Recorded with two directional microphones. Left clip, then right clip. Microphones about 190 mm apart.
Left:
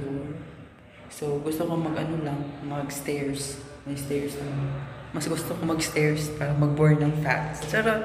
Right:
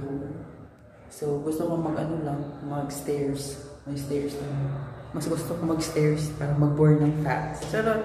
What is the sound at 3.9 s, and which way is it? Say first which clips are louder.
Speech: even; 25° left (ahead or behind).